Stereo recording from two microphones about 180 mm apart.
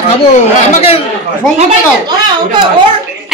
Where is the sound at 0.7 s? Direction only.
35° left (ahead or behind).